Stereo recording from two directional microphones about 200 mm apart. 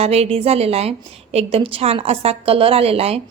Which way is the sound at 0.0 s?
30° right (ahead or behind).